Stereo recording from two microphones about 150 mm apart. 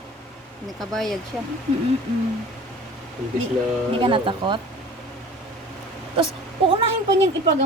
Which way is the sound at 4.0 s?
35° right (ahead or behind).